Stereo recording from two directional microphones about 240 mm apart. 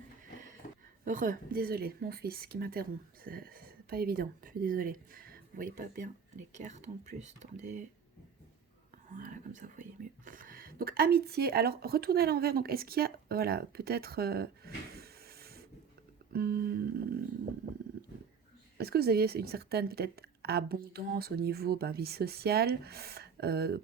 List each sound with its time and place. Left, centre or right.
1.0 s a woman's voice: right
9.1 s a woman's voice: right
18.8 s a woman's voice: right